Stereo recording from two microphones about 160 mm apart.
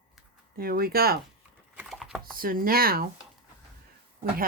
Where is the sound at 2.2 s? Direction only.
65° right (ahead or behind).